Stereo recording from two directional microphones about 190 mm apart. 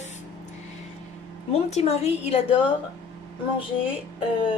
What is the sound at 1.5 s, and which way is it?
Speech, 35° left (ahead or behind).